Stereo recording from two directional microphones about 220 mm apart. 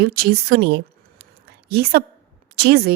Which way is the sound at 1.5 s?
45° right (ahead or behind).